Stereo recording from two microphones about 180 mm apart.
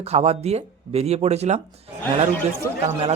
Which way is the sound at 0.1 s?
35° right (ahead or behind).